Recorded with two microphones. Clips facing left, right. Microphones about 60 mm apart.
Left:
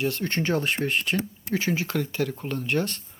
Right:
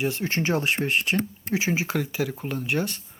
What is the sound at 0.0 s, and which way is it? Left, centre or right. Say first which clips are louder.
Speech: right 1 dB; centre.